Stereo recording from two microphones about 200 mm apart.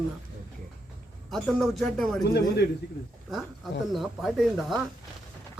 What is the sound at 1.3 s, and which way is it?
Speech, centre (ahead or behind).